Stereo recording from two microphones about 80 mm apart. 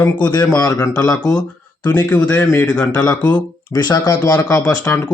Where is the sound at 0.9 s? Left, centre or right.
Left.